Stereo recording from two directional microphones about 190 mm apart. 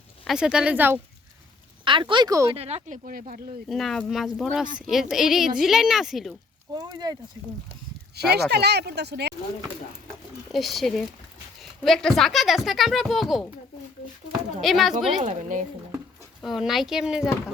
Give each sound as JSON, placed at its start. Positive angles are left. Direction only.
{"t": 0.3, "sound": "speech", "side_deg": -5}
{"t": 1.8, "sound": "speech", "side_deg": -25}
{"t": 2.5, "sound": "speech", "side_deg": -35}
{"t": 3.7, "sound": "speech", "side_deg": 0}
{"t": 6.7, "sound": "speech", "side_deg": -20}
{"t": 8.1, "sound": "speech", "side_deg": -60}
{"t": 10.5, "sound": "speech", "side_deg": 0}
{"t": 14.6, "sound": "speech", "side_deg": 0}
{"t": 15.2, "sound": "speech", "side_deg": -40}
{"t": 16.4, "sound": "speech", "side_deg": 0}